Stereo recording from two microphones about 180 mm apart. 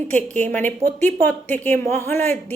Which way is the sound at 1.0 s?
10° left (ahead or behind).